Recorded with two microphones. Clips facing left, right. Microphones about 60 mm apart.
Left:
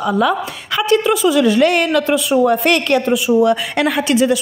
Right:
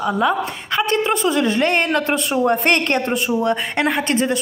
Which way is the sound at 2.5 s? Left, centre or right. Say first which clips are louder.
Left 3 dB; right.